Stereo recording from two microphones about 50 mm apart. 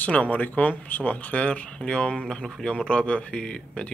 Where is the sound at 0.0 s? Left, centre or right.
Left.